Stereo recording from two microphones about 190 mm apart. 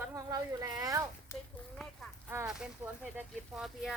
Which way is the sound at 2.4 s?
5° right (ahead or behind).